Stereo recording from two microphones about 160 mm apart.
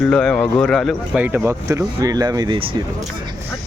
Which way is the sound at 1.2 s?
15° right (ahead or behind).